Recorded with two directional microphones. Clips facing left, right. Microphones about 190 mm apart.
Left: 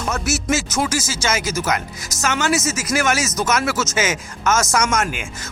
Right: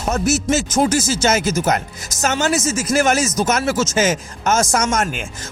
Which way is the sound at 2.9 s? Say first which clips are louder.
Right 4 dB; 35° right (ahead or behind).